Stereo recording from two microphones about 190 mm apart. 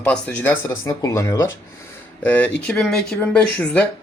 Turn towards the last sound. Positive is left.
turn(degrees=5)  # may be behind; listen again after turning